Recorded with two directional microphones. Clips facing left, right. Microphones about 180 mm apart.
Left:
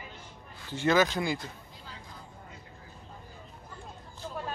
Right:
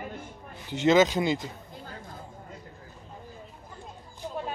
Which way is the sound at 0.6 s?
20° right (ahead or behind).